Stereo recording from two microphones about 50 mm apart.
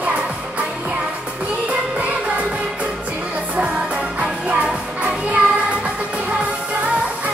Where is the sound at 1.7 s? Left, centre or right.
Right.